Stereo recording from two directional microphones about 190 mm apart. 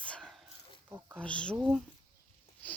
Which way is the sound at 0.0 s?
5° left (ahead or behind).